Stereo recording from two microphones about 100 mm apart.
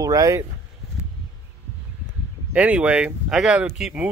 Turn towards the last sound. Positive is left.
turn(degrees=-10)  # may be behind; listen again after turning